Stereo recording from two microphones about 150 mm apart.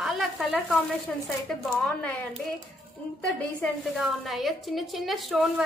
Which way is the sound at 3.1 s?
5° left (ahead or behind).